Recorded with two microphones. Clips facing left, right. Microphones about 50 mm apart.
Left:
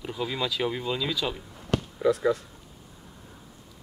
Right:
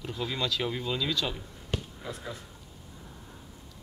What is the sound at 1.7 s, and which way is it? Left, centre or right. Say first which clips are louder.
Speech: left 12 dB; left.